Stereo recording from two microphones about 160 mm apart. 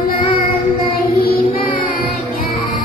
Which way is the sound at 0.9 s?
65° left (ahead or behind).